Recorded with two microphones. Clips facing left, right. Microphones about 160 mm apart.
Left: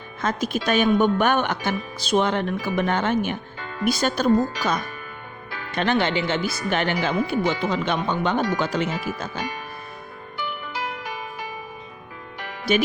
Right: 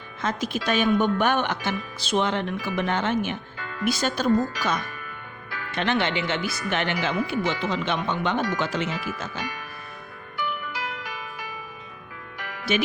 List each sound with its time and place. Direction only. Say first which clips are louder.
0.2 s speech: left 3 dB; 45° left (ahead or behind)
3.6 s music: left 2 dB; 25° left (ahead or behind)
3.8 s speech: left 3 dB; 45° left (ahead or behind)
4.3 s speech: left 2 dB; 20° left (ahead or behind)
4.8 s music: left 2 dB; 25° left (ahead or behind)
5.7 s speech: left 3 dB; 35° left (ahead or behind)
8.4 s speech: left 3 dB; 25° left (ahead or behind)
8.6 s speech: left 3 dB; 40° left (ahead or behind)
9.4 s music: left 3 dB; 25° left (ahead or behind)